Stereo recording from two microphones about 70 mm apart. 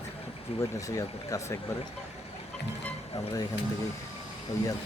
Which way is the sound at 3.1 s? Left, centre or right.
Left.